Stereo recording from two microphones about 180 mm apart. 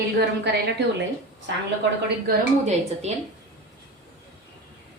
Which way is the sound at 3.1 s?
35° right (ahead or behind).